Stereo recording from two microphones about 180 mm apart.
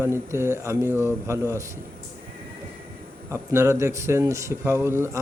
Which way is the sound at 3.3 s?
15° right (ahead or behind).